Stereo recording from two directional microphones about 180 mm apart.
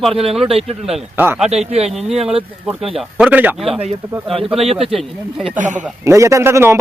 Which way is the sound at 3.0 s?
5° right (ahead or behind).